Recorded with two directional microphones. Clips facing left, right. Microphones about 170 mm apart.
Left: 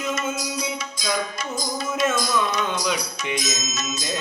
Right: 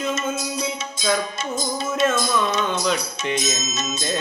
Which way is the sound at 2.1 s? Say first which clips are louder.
Right 2 dB; 25° right (ahead or behind).